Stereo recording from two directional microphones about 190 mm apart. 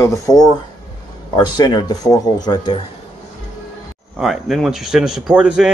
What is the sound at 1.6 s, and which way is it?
Speech, 20° left (ahead or behind).